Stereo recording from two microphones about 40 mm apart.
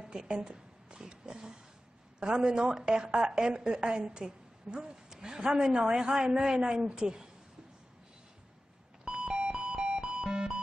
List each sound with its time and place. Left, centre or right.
0.0 s a woman's voice: centre
9.0 s music: right